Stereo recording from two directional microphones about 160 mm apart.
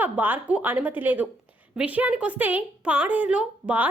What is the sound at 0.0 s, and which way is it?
A woman's voice, 10° right (ahead or behind).